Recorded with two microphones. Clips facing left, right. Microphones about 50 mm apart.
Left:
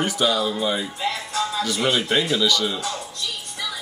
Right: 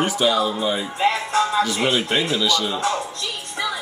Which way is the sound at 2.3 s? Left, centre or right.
Centre.